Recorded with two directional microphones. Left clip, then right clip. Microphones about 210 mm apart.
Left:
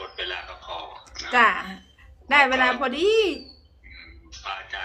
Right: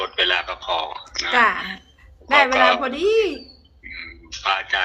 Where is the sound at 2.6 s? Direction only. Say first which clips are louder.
Right 6 dB; 55° right (ahead or behind).